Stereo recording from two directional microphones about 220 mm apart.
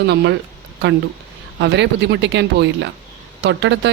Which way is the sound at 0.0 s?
50° right (ahead or behind).